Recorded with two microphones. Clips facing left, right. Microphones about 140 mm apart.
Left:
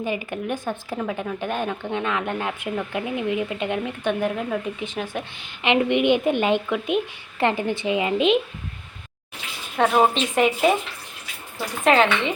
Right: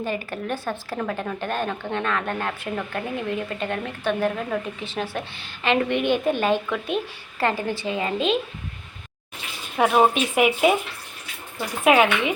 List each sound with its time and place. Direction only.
0.0 s speech: 15° left (ahead or behind)
0.9 s speech: 5° left (ahead or behind)
4.2 s speech: centre (ahead or behind)
5.6 s a woman's voice: 20° left (ahead or behind)
9.7 s speech: 5° right (ahead or behind)
11.9 s speech: 10° right (ahead or behind)